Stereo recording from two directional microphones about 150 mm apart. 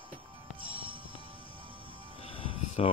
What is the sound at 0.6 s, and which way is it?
Music, 35° right (ahead or behind).